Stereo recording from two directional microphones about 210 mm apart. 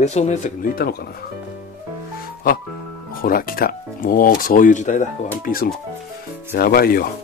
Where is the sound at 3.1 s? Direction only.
45° left (ahead or behind).